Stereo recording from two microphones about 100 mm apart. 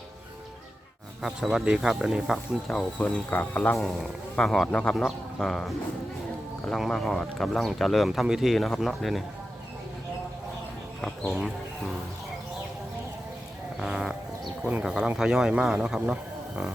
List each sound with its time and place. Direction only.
1.2 s speech: 5° right (ahead or behind)
3.2 s speech: 20° left (ahead or behind)
4.4 s speech: 5° left (ahead or behind)
11.0 s speech: centre (ahead or behind)
13.7 s a sound: centre (ahead or behind)
14.6 s speech: 10° right (ahead or behind)